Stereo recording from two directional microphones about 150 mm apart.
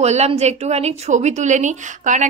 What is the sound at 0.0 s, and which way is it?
A woman's voice, 45° right (ahead or behind).